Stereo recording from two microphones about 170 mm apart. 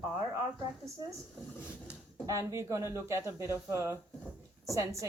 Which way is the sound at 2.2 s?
20° right (ahead or behind).